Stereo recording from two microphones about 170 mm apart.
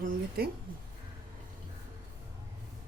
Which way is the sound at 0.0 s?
65° right (ahead or behind).